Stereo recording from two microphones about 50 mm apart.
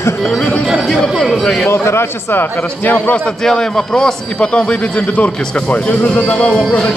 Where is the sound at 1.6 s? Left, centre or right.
Left.